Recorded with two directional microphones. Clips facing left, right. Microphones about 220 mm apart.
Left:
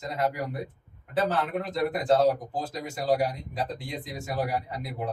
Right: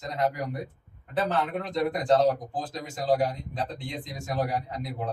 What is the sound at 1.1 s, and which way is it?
A man's voice, 5° left (ahead or behind).